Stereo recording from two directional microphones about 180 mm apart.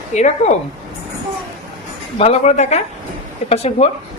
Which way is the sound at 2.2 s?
35° left (ahead or behind).